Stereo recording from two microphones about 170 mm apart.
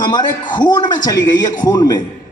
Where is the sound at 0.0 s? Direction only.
25° left (ahead or behind).